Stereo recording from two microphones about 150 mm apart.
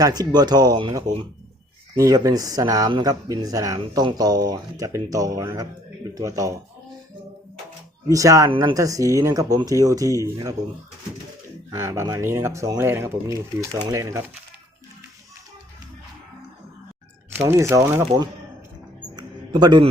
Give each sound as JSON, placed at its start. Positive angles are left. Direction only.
{"t": 0.0, "sound": "speech", "side_deg": -25}
{"t": 2.0, "sound": "speech", "side_deg": -25}
{"t": 8.0, "sound": "speech", "side_deg": -20}
{"t": 8.4, "sound": "speech", "side_deg": -35}
{"t": 8.7, "sound": "speech", "side_deg": -20}
{"t": 11.7, "sound": "speech", "side_deg": -20}
{"t": 17.4, "sound": "speech", "side_deg": -20}
{"t": 19.1, "sound": "music", "side_deg": -30}